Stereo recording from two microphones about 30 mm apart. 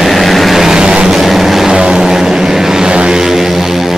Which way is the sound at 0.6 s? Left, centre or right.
Right.